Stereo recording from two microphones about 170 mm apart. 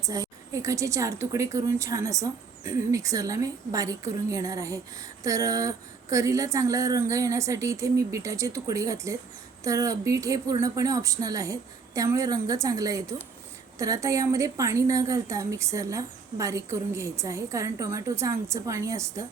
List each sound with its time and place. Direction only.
0.1 s a woman's voice: 20° right (ahead or behind)